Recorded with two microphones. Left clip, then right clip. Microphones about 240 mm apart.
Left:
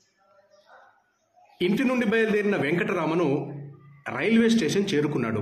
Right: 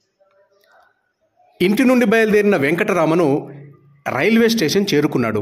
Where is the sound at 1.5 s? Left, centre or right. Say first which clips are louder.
Right 9 dB; right.